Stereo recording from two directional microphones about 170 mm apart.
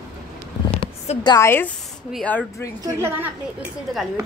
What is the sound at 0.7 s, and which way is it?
A woman's voice, 30° left (ahead or behind).